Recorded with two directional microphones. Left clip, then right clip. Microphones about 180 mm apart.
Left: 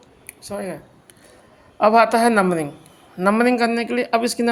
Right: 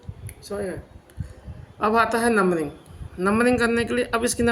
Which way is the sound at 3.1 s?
35° left (ahead or behind).